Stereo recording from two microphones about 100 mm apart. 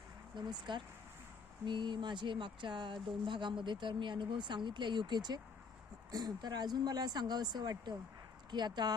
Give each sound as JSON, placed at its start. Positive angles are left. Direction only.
{"t": 0.3, "sound": "speech", "side_deg": -50}